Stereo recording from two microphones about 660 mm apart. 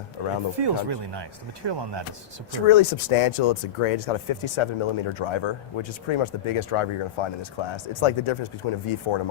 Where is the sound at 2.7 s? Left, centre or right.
Left.